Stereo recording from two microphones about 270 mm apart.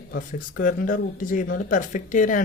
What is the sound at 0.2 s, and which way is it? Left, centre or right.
Speech, left.